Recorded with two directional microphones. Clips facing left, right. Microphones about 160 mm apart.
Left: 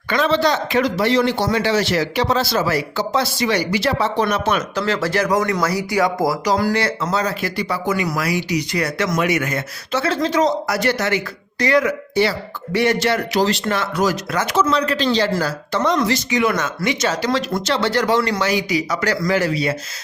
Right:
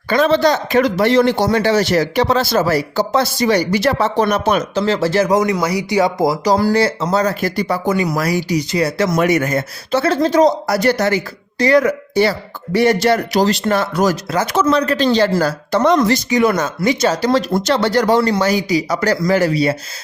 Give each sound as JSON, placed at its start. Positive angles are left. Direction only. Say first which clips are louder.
{"t": 0.1, "sound": "speech", "louder": "right 4 dB", "side_deg": -45}
{"t": 6.4, "sound": "speech", "louder": "right 4 dB", "side_deg": -30}
{"t": 7.9, "sound": "speech", "louder": "right 3 dB", "side_deg": -30}